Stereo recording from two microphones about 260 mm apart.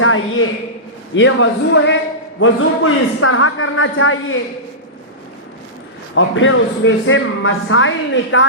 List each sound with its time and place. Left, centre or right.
0.0 s a man's voice: left
6.1 s a man's voice: left